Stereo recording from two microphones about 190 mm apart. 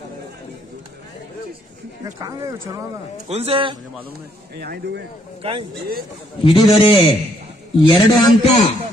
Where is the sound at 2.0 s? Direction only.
20° right (ahead or behind).